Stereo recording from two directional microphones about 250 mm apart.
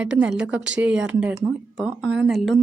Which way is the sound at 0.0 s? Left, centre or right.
Centre.